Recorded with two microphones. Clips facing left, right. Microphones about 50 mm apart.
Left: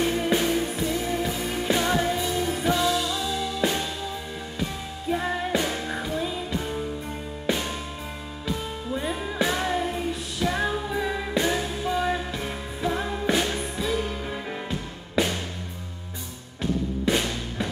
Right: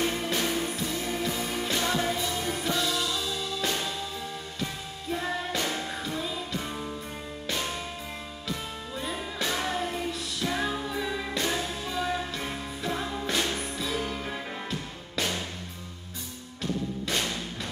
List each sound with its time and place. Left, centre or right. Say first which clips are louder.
0.2 s music: left 5 dB; centre
5.1 s music: left 5 dB; left
8.5 s music: left 7 dB; left
15.2 s music: left 6 dB; left
17.0 s music: left 5 dB; left